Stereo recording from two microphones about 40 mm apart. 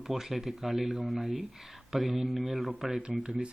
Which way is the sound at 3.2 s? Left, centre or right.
Right.